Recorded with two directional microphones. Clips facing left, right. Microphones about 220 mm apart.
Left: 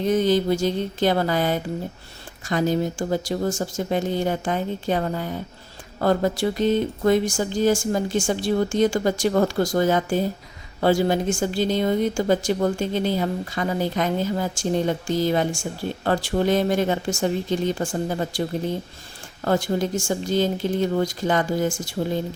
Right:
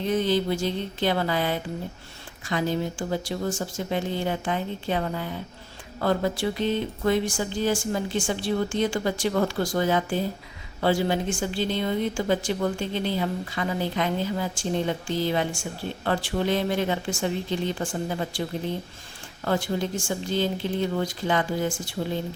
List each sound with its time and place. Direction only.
0.0 s a woman's voice: 45° left (ahead or behind)
19.5 s a woman's voice: 40° left (ahead or behind)